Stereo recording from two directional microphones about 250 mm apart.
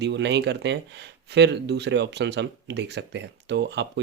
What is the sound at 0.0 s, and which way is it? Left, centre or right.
Speech, right.